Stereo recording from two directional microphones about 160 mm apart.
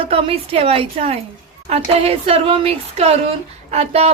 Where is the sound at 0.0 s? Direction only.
35° right (ahead or behind).